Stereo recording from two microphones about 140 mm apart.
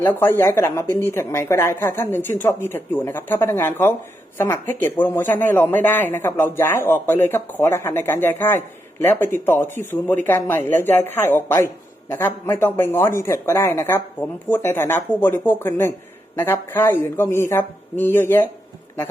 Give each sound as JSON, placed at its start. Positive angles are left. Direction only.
{"t": 0.0, "sound": "speech", "side_deg": 15}